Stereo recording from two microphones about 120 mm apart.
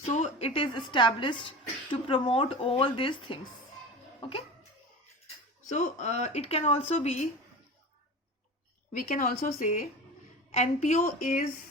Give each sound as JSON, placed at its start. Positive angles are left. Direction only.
{"t": 0.1, "sound": "a woman's voice", "side_deg": 65}
{"t": 4.2, "sound": "music", "side_deg": 50}
{"t": 5.6, "sound": "speech", "side_deg": 80}
{"t": 8.9, "sound": "speech", "side_deg": 90}